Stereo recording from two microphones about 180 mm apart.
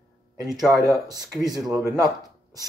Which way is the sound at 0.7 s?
20° right (ahead or behind).